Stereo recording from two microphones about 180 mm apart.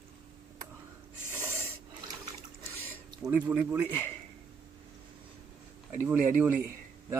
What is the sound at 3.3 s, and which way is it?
Speech, 10° right (ahead or behind).